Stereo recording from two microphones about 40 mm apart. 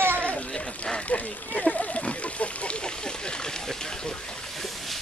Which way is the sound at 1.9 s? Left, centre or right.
Left.